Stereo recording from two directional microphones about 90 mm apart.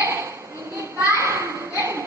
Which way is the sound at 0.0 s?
30° right (ahead or behind).